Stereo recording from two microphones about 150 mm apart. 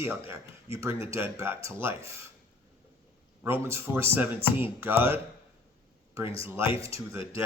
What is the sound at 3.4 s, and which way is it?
A man's voice, 15° right (ahead or behind).